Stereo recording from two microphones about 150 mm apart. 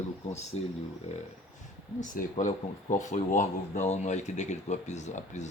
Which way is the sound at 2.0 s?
55° left (ahead or behind).